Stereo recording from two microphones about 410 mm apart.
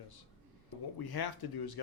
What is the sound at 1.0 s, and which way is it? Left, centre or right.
Speech, left.